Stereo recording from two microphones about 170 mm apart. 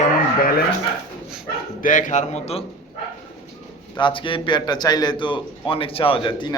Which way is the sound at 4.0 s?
30° left (ahead or behind).